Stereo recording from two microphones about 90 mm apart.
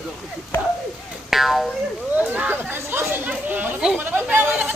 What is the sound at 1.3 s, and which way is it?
Speech, centre (ahead or behind).